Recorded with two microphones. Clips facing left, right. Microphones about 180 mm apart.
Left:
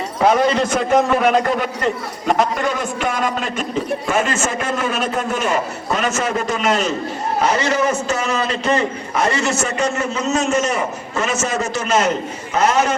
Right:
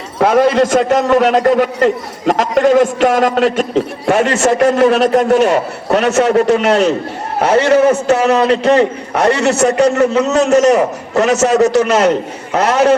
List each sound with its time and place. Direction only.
0.2 s a man's voice: 70° right (ahead or behind)